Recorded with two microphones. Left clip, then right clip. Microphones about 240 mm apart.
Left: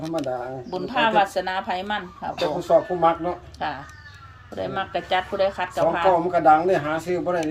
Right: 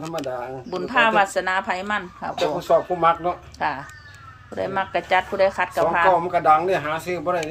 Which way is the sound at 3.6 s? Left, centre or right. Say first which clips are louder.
Right 4 dB; centre.